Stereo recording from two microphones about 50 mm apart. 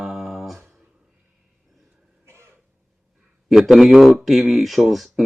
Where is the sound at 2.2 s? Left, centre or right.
Right.